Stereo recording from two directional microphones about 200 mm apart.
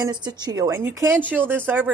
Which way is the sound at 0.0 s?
20° right (ahead or behind).